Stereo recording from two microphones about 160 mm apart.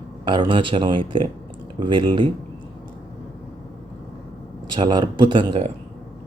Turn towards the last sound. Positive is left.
turn(degrees=-30)  # may be behind; listen again after turning